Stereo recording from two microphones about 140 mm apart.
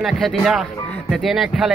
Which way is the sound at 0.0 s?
Centre (ahead or behind).